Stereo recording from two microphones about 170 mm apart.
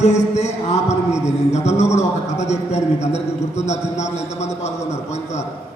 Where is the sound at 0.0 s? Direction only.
40° left (ahead or behind).